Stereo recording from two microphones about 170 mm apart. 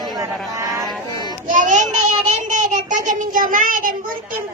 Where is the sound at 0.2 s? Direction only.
20° right (ahead or behind).